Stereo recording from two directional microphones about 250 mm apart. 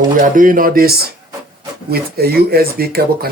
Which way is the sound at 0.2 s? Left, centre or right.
Right.